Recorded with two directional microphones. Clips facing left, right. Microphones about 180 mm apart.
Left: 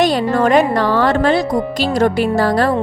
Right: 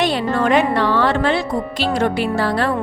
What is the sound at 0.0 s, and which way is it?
Speech, 40° left (ahead or behind).